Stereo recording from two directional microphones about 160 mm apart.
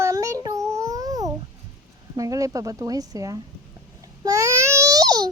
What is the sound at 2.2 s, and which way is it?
Speech, 20° right (ahead or behind).